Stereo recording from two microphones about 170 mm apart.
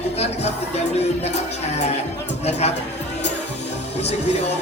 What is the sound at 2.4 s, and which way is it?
Speech, 40° left (ahead or behind).